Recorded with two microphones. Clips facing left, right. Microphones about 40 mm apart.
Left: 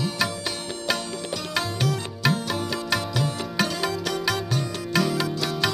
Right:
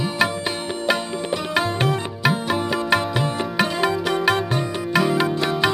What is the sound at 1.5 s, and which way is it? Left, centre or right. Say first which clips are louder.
Music: right 5 dB; right.